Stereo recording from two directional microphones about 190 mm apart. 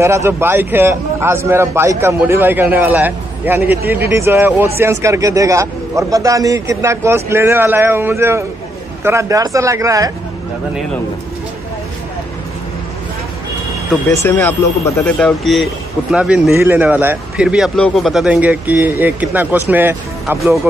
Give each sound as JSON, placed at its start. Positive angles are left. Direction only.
{"t": 0.0, "sound": "a man's voice", "side_deg": -15}
{"t": 14.2, "sound": "a man's voice", "side_deg": 10}